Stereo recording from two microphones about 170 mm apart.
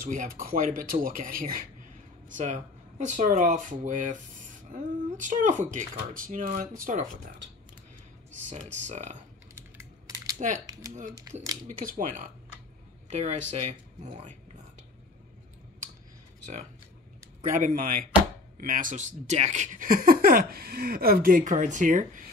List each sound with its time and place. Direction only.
0.0 s speech: 50° right (ahead or behind)
8.5 s speech: 45° right (ahead or behind)
9.6 s typing: 20° right (ahead or behind)
11.0 s speech: 50° right (ahead or behind)
17.5 s speech: 50° right (ahead or behind)